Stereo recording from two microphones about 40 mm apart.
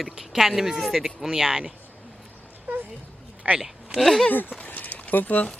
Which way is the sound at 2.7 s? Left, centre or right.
Right.